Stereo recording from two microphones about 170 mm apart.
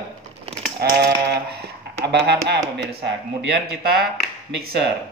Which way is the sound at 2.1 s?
85° right.